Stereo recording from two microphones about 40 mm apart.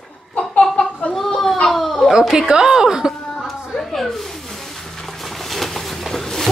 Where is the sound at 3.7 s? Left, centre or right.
Centre.